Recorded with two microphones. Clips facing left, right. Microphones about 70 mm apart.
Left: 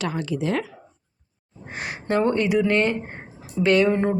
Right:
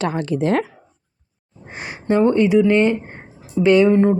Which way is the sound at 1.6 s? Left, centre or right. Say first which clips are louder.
Right 5 dB; centre.